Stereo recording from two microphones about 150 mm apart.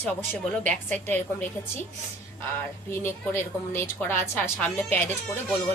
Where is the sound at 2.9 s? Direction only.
15° left (ahead or behind).